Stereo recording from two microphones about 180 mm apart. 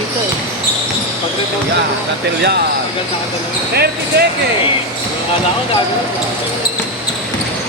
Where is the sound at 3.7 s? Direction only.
60° right (ahead or behind).